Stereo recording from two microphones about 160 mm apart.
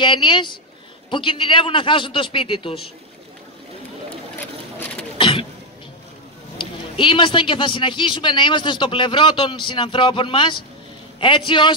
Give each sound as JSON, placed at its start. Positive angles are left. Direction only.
{"t": 0.0, "sound": "a man's voice", "side_deg": 30}
{"t": 4.4, "sound": "sewing machine", "side_deg": 10}
{"t": 5.1, "sound": "a sound", "side_deg": 35}
{"t": 6.6, "sound": "a man's voice", "side_deg": 30}